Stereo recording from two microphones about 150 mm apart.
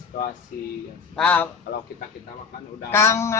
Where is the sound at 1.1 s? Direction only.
10° left (ahead or behind).